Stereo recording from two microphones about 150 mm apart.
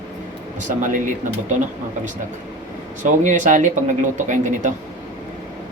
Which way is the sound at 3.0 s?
55° right (ahead or behind).